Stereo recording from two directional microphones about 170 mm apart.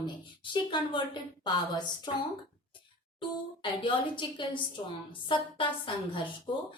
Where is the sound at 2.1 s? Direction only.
25° left (ahead or behind).